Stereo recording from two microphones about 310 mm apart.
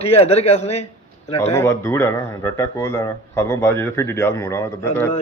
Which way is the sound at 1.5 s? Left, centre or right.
Centre.